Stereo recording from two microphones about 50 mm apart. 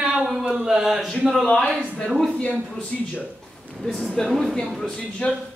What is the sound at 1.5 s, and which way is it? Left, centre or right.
Speech, centre.